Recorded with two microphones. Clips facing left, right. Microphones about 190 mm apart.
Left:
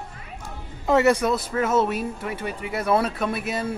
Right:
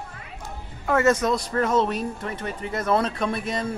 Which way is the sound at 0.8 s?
15° left (ahead or behind).